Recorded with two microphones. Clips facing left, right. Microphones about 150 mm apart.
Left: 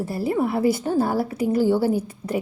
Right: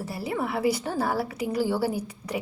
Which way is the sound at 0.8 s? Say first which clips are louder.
Left 7 dB; 25° left (ahead or behind).